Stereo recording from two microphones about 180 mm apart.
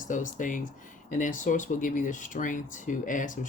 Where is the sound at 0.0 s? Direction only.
45° left (ahead or behind).